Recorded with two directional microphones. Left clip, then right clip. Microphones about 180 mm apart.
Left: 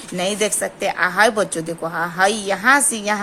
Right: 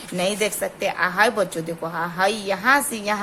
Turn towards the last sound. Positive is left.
turn(degrees=15)  # may be behind; listen again after turning